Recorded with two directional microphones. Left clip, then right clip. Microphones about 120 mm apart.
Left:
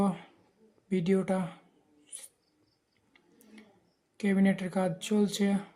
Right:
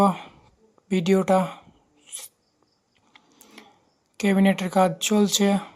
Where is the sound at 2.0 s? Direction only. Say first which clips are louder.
Right 11 dB; 25° right (ahead or behind).